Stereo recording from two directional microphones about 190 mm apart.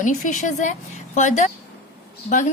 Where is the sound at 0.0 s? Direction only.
40° left (ahead or behind).